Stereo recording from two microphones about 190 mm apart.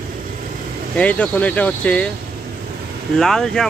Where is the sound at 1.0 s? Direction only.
5° left (ahead or behind).